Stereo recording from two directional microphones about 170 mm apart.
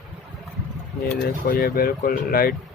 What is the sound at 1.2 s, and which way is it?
Speech, 60° left (ahead or behind).